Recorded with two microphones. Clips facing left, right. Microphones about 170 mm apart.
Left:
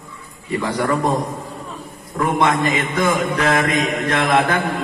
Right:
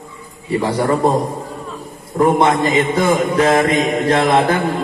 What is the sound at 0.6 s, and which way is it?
Speech, 30° right (ahead or behind).